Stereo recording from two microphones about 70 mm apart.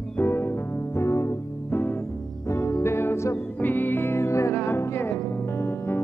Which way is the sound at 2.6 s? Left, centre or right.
Left.